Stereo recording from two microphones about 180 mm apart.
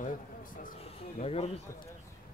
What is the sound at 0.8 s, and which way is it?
Speech, 35° left (ahead or behind).